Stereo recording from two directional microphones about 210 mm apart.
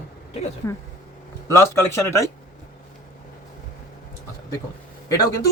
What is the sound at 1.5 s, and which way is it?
Speech, 15° left (ahead or behind).